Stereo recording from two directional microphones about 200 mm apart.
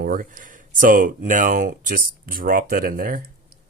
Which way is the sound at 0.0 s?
45° right (ahead or behind).